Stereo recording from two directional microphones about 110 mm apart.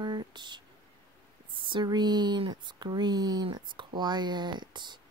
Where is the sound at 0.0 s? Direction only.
40° right (ahead or behind).